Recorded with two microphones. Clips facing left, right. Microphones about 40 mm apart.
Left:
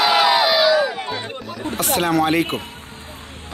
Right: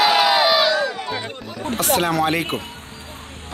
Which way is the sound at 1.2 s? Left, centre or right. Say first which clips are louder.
Left 1 dB; centre.